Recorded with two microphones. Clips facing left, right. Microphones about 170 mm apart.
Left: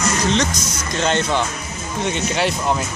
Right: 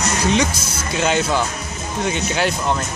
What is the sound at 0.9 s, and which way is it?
Speech, 5° right (ahead or behind).